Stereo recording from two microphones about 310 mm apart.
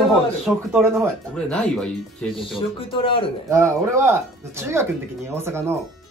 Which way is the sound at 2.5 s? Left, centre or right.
Centre.